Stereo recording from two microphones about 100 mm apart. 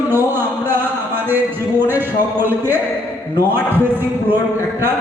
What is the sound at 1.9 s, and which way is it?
Speech, 20° right (ahead or behind).